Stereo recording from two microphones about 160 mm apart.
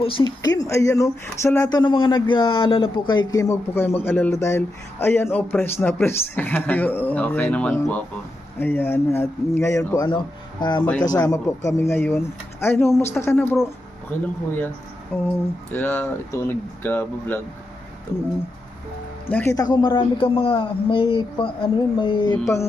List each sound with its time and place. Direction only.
0.0 s speech: 30° left (ahead or behind)
0.5 s speech: 20° left (ahead or behind)
15.1 s speech: 15° left (ahead or behind)
19.3 s speech: 10° left (ahead or behind)
19.5 s speech: 25° left (ahead or behind)